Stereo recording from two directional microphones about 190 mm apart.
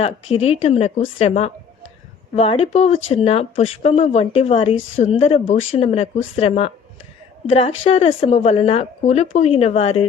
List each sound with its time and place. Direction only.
0.0 s speech: 35° left (ahead or behind)
4.8 s a woman's voice: 90° left
5.0 s speech: 30° left (ahead or behind)
7.9 s speech: 35° left (ahead or behind)